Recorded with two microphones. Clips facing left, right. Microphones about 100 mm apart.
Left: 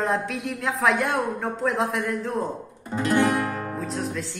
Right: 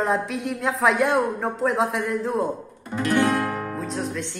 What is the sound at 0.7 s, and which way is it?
A man's voice, centre (ahead or behind).